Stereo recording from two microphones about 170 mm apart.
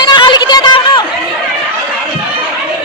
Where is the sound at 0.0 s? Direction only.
25° left (ahead or behind).